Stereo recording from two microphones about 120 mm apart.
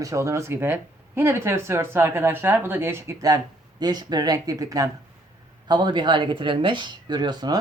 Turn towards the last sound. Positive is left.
turn(degrees=-35)  # may be behind; listen again after turning